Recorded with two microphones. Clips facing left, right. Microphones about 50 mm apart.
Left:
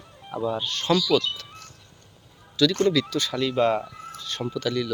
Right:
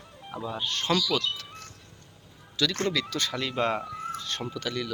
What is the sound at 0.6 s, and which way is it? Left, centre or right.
Speech, right.